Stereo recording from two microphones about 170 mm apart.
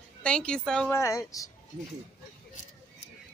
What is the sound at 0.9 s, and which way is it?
Speech, 15° left (ahead or behind).